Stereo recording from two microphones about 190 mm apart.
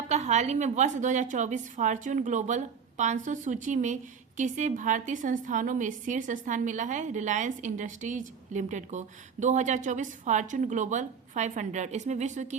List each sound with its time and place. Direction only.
0.1 s a woman's voice: 35° right (ahead or behind)